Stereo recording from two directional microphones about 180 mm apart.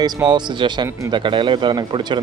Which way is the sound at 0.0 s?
25° right (ahead or behind).